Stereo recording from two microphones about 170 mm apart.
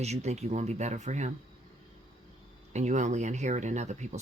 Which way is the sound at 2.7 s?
45° right (ahead or behind).